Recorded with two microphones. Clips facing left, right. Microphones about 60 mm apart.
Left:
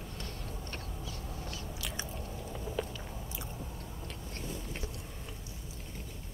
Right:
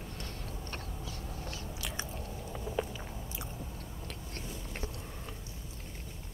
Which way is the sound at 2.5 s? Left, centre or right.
Centre.